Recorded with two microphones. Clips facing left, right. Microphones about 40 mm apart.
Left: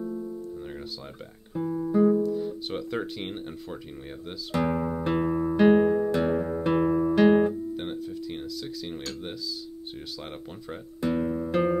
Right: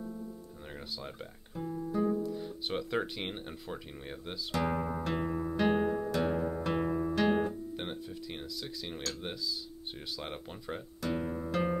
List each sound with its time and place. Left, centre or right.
0.0 s music: centre
1.5 s guitar: centre
2.2 s speech: centre
4.6 s music: centre
5.0 s music: centre
7.7 s music: centre
11.1 s music: centre